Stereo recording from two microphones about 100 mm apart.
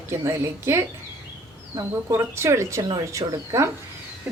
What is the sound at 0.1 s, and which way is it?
Speech, 25° right (ahead or behind).